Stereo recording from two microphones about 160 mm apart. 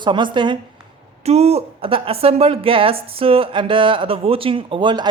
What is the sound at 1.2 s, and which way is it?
A woman's voice, 40° right (ahead or behind).